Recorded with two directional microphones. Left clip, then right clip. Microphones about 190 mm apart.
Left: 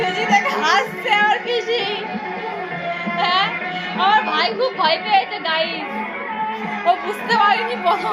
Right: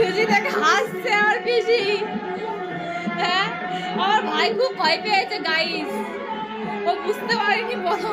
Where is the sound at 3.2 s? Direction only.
25° right (ahead or behind).